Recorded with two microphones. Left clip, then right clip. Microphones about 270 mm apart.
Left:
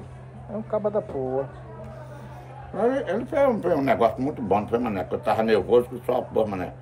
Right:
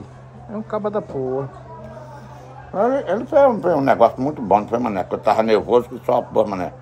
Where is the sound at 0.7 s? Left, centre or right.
Right.